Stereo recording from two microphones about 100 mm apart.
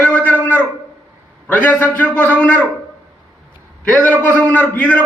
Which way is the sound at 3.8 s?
15° left (ahead or behind).